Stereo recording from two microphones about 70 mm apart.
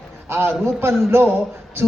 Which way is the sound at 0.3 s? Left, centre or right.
Right.